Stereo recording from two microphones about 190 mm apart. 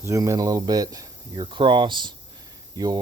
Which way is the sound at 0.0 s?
15° right (ahead or behind).